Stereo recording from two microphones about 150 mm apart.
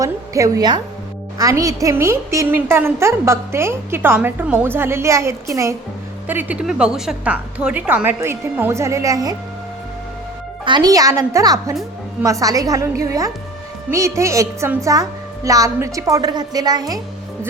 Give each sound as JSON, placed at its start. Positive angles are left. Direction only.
{"t": 0.0, "sound": "a woman's voice", "side_deg": -20}
{"t": 10.7, "sound": "a woman's voice", "side_deg": -25}